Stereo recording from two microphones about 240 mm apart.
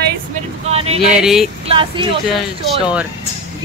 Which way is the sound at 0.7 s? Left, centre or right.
Right.